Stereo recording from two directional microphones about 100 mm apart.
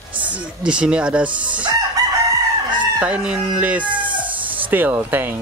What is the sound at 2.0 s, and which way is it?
Chicken, 40° right (ahead or behind).